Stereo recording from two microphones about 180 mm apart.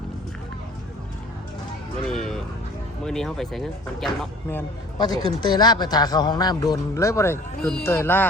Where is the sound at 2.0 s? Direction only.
5° left (ahead or behind).